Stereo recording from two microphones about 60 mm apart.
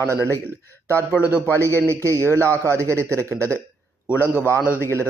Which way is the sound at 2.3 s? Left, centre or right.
Left.